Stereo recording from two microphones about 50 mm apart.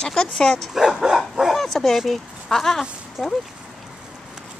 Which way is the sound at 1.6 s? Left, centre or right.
Centre.